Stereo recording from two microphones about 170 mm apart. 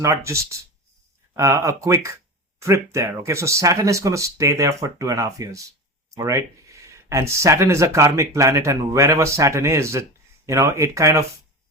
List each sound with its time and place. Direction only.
0.0 s speech: 15° right (ahead or behind)